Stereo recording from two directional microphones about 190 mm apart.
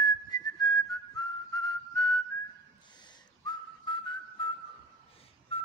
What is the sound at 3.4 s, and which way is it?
Whistling, 25° left (ahead or behind).